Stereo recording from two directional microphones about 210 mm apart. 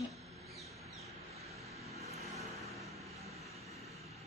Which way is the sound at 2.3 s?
Centre (ahead or behind).